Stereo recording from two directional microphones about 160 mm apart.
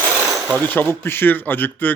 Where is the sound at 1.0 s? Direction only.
15° left (ahead or behind).